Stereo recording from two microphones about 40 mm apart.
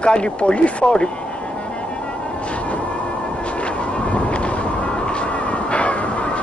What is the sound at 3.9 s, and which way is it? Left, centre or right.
Vehicle, left.